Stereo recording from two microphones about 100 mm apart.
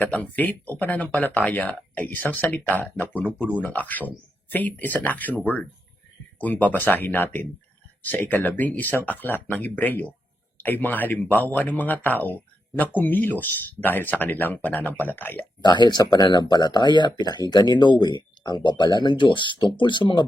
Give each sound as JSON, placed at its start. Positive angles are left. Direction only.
{"t": 0.0, "sound": "speech", "side_deg": 15}
{"t": 6.4, "sound": "speech", "side_deg": 15}
{"t": 15.6, "sound": "speech", "side_deg": 50}